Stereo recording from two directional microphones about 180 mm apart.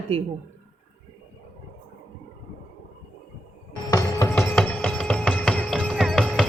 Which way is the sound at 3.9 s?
20° left (ahead or behind).